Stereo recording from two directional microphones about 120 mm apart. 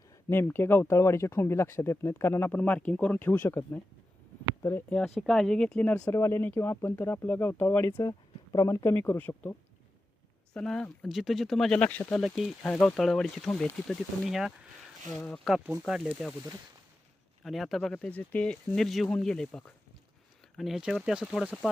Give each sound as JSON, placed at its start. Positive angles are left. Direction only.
{"t": 0.1, "sound": "speech", "side_deg": 20}
{"t": 4.9, "sound": "speech", "side_deg": 0}
{"t": 6.1, "sound": "speech", "side_deg": 20}
{"t": 15.9, "sound": "speech", "side_deg": -5}
{"t": 17.4, "sound": "speech", "side_deg": 0}
{"t": 17.9, "sound": "speech", "side_deg": 10}